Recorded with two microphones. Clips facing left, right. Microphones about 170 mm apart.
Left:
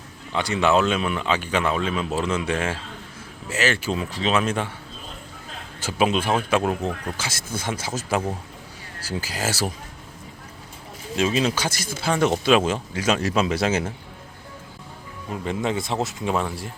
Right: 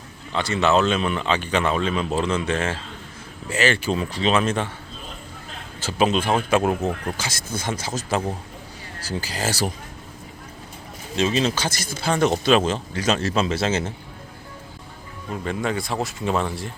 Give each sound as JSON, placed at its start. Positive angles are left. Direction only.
{"t": 0.3, "sound": "speech", "side_deg": 10}
{"t": 5.8, "sound": "speech", "side_deg": 5}
{"t": 7.2, "sound": "speech", "side_deg": 5}
{"t": 11.2, "sound": "speech", "side_deg": 10}
{"t": 15.3, "sound": "speech", "side_deg": 20}
{"t": 16.3, "sound": "speech", "side_deg": 10}